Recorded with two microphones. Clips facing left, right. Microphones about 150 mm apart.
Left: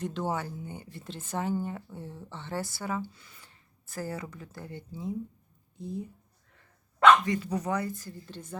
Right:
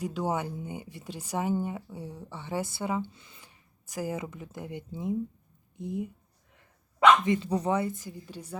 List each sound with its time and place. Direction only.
0.0 s speech: 10° right (ahead or behind)